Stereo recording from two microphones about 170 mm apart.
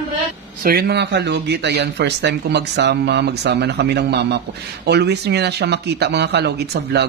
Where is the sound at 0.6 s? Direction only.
65° right (ahead or behind).